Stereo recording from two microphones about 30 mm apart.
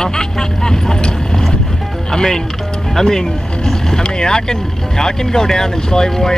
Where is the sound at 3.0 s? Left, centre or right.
Centre.